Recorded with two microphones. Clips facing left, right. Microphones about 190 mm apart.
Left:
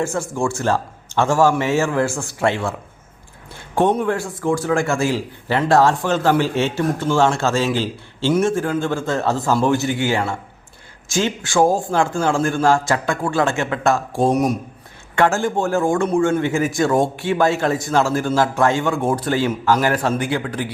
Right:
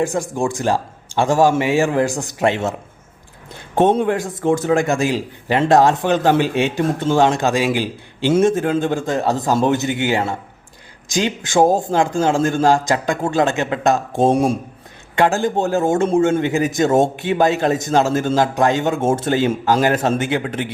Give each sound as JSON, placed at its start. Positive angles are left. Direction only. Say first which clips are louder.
{"t": 0.0, "sound": "a man's voice", "louder": "right 2 dB", "side_deg": -15}
{"t": 3.8, "sound": "a man's voice", "louder": "right 2 dB", "side_deg": -20}
{"t": 15.1, "sound": "a man's voice", "louder": "right 1 dB", "side_deg": -15}